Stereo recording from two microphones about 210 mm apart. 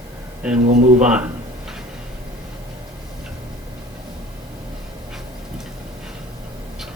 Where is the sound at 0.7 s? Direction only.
35° right (ahead or behind).